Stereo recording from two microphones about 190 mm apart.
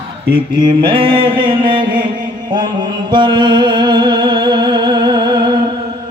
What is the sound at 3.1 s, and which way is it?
Music, 25° right (ahead or behind).